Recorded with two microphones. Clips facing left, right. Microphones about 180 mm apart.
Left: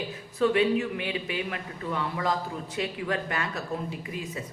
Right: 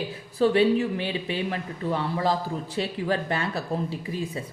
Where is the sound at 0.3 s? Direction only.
35° right (ahead or behind).